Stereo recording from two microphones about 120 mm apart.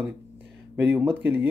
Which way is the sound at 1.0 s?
15° right (ahead or behind).